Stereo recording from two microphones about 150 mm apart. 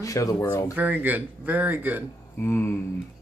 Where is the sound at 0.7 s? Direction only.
10° right (ahead or behind).